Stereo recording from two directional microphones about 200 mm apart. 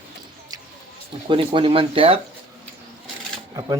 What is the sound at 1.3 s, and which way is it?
Speech, 25° right (ahead or behind).